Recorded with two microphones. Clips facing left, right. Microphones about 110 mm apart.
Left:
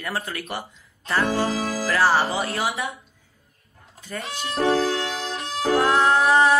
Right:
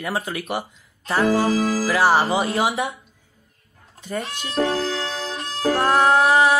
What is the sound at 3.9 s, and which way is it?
Goat, 25° right (ahead or behind).